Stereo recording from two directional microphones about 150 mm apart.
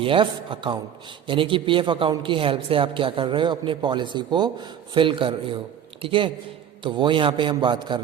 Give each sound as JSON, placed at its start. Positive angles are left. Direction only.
{"t": 0.0, "sound": "speech", "side_deg": -35}